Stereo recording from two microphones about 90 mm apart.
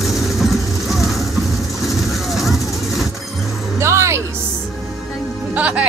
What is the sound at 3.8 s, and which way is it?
Music, 30° right (ahead or behind).